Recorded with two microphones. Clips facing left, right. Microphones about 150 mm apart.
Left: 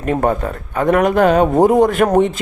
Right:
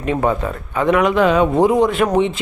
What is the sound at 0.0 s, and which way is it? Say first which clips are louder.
Speech: left 1 dB; 50° left (ahead or behind).